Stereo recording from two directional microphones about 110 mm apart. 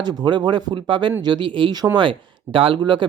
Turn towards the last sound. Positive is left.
turn(degrees=-45)  # may be behind; listen again after turning